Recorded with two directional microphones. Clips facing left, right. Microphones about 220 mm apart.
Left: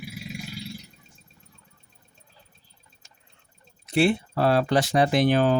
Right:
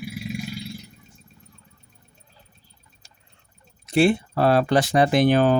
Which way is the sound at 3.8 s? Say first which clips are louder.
Right 3 dB; 45° right (ahead or behind).